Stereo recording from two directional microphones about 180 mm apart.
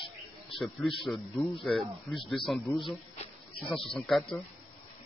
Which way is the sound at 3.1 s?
35° left (ahead or behind).